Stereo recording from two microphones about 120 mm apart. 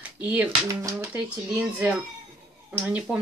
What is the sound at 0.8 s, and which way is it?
Speech, 25° right (ahead or behind).